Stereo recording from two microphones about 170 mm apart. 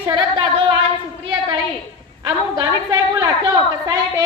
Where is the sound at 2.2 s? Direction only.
25° right (ahead or behind).